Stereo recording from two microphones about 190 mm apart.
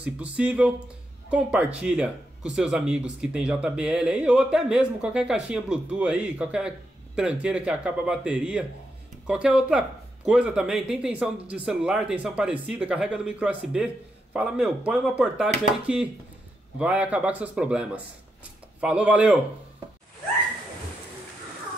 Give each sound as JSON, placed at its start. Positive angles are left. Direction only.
{"t": 0.0, "sound": "speech", "side_deg": -5}